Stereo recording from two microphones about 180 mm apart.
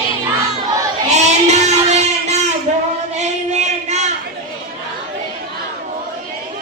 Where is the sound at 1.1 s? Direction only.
40° right (ahead or behind).